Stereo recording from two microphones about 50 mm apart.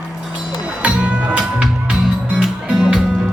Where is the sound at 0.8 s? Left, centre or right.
Right.